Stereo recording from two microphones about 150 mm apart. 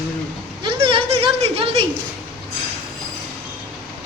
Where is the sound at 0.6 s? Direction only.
35° right (ahead or behind).